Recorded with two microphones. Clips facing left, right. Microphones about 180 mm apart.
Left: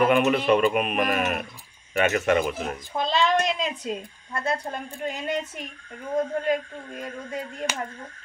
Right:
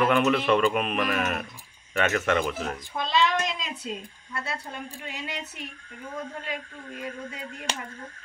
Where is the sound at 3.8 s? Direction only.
45° left (ahead or behind).